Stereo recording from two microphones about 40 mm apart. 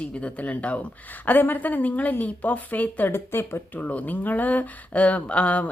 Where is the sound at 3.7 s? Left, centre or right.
Left.